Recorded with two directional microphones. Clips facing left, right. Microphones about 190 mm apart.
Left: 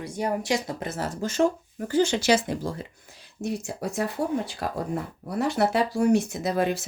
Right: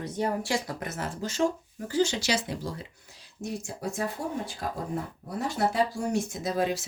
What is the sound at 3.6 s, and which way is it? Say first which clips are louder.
Speech: left 3 dB; 70° left (ahead or behind).